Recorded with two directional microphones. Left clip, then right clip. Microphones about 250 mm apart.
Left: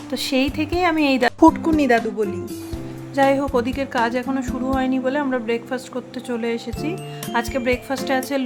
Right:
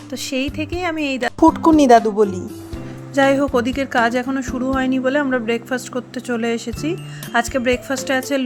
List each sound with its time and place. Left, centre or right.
0.1 s speech: centre
3.2 s speech: centre